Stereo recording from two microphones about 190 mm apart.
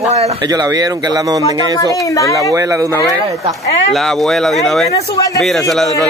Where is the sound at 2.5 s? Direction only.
15° right (ahead or behind).